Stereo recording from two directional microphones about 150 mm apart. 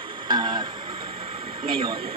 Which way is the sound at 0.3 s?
30° right (ahead or behind).